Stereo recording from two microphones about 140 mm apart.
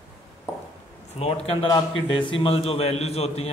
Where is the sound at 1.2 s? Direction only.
45° left (ahead or behind).